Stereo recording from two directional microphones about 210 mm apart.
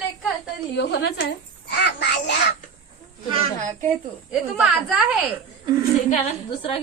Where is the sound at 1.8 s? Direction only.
55° left (ahead or behind).